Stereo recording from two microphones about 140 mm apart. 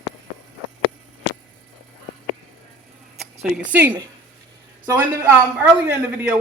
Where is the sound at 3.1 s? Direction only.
5° right (ahead or behind).